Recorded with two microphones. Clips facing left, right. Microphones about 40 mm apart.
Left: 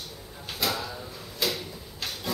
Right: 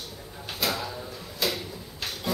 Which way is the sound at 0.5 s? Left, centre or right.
Centre.